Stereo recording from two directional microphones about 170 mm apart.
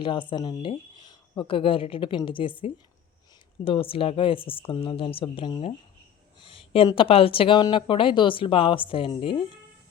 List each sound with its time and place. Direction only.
0.0 s speech: 30° left (ahead or behind)